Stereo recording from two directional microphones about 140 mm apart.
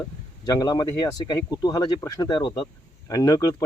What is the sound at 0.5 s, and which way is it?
Speech, 25° left (ahead or behind).